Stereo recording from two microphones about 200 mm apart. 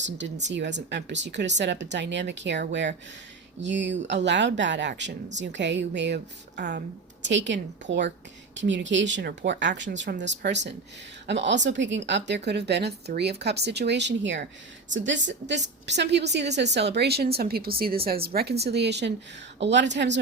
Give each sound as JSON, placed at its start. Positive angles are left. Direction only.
{"t": 0.4, "sound": "a woman's voice", "side_deg": -60}